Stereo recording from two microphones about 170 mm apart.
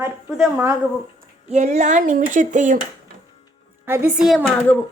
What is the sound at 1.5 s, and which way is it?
Speech, 40° right (ahead or behind).